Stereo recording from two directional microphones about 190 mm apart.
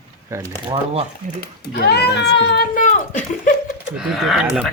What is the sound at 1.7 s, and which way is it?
Speech, 60° left (ahead or behind).